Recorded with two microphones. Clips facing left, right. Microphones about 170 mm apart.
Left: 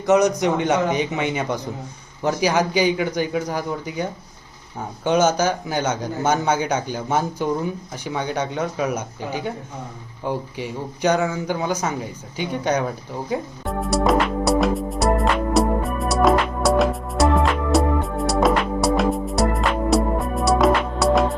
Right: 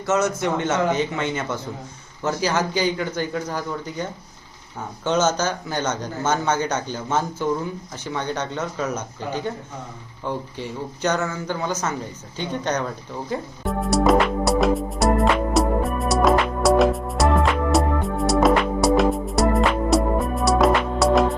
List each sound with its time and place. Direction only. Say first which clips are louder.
0.0 s speech: left 5 dB; 15° left (ahead or behind)
13.7 s music: right 1 dB; centre (ahead or behind)